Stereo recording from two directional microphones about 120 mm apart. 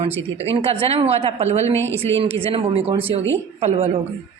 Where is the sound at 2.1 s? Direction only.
50° right (ahead or behind).